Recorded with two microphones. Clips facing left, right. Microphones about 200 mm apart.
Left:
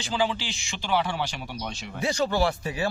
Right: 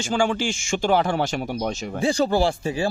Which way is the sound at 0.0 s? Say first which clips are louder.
Right 5 dB; 50° right (ahead or behind).